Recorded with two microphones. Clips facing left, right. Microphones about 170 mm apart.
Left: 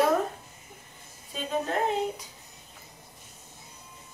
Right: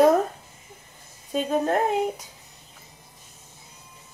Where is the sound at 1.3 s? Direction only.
50° right (ahead or behind).